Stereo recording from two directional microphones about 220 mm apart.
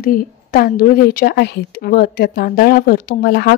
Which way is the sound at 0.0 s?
40° left (ahead or behind).